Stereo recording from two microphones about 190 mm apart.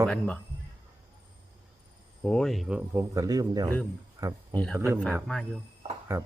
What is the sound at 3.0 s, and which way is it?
Speech, 20° right (ahead or behind).